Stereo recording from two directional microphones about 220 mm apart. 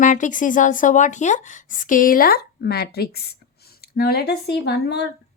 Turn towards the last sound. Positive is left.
turn(degrees=50)  # may be behind; listen again after turning